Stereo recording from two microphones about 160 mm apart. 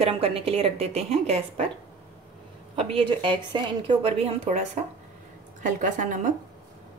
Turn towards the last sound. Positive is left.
turn(degrees=-55)  # may be behind; listen again after turning